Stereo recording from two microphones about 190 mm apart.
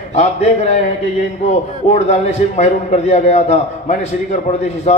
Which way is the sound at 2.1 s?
35° left (ahead or behind).